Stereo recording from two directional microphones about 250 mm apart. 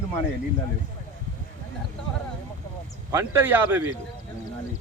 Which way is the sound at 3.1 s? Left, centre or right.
Centre.